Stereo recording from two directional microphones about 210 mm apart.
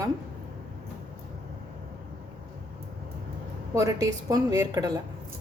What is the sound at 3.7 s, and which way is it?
A woman's voice, 15° right (ahead or behind).